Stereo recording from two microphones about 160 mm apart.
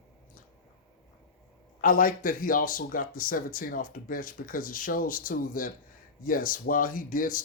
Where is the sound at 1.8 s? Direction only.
60° left (ahead or behind).